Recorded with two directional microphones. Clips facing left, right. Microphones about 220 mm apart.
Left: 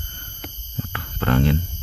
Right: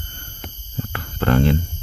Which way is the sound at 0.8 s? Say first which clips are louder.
Right 3 dB; 40° right (ahead or behind).